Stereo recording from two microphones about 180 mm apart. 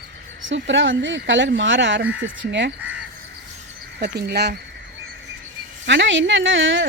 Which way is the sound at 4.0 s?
65° right (ahead or behind).